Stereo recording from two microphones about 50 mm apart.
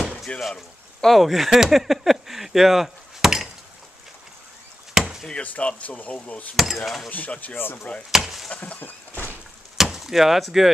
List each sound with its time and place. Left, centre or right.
0.3 s speech: left
1.0 s speech: centre
4.9 s chop: centre
5.3 s speech: left
6.5 s speech: centre
7.1 s speech: left
7.5 s speech: left
8.1 s chop: centre
8.5 s a sound: left
9.8 s a sound: centre